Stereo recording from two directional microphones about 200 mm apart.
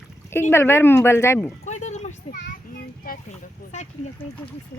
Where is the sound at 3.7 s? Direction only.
35° left (ahead or behind).